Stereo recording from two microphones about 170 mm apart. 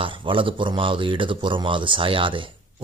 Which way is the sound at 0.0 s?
30° right (ahead or behind).